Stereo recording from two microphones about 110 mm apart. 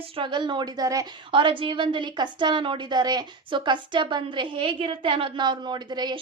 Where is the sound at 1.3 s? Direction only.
50° right (ahead or behind).